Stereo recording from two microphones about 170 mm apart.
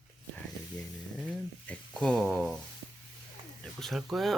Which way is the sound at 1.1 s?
5° right (ahead or behind).